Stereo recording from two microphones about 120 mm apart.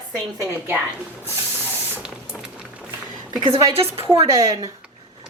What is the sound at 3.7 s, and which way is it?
Speech, 55° right (ahead or behind).